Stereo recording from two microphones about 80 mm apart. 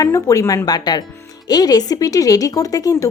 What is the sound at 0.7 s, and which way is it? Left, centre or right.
Speech, left.